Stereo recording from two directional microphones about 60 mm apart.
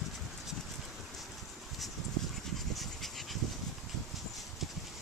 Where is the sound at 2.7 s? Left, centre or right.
Centre.